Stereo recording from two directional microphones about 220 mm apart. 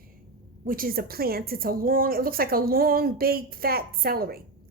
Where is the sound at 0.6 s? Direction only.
40° right (ahead or behind).